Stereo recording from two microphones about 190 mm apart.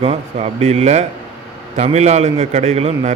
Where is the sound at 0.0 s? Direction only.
30° right (ahead or behind).